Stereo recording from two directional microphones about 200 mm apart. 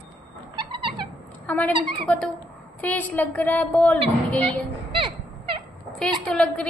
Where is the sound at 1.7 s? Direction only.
25° right (ahead or behind).